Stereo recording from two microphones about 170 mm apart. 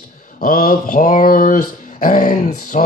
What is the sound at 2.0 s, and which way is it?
Speech, 50° left (ahead or behind).